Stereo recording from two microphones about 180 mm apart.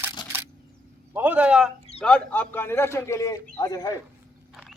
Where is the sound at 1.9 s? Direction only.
5° left (ahead or behind).